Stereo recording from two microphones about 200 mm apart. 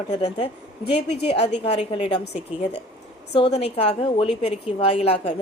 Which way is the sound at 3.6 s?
30° left (ahead or behind).